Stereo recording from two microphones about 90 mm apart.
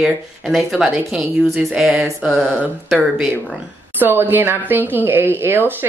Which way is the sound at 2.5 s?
10° left (ahead or behind).